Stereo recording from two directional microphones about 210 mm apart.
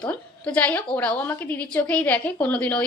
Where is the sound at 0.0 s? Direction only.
5° left (ahead or behind).